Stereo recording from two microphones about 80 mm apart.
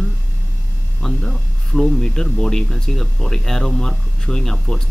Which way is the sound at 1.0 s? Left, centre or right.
Centre.